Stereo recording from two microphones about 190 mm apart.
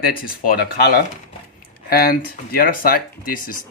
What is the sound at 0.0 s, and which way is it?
Speech, 50° left (ahead or behind).